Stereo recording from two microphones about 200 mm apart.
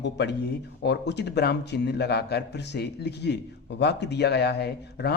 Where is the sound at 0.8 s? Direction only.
60° left (ahead or behind).